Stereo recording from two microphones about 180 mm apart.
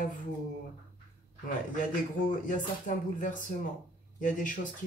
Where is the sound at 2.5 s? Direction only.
45° left (ahead or behind).